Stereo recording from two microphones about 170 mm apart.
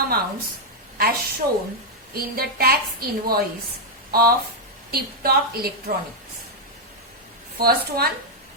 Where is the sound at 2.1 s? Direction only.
65° right (ahead or behind).